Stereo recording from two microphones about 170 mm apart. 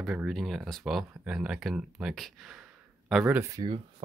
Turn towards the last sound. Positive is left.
turn(degrees=-25)  # may be behind; listen again after turning